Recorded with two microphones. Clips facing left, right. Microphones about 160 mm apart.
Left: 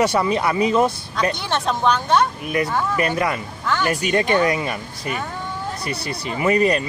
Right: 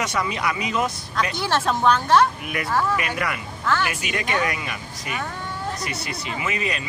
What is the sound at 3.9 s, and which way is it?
Speech, 40° left (ahead or behind).